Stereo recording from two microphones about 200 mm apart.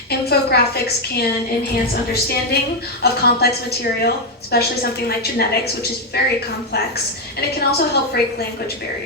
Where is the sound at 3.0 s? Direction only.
50° left (ahead or behind).